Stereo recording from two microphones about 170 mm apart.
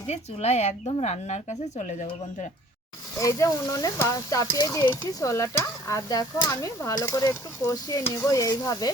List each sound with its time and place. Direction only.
0.1 s a woman's voice: 40° left (ahead or behind)
3.2 s stir: 20° left (ahead or behind)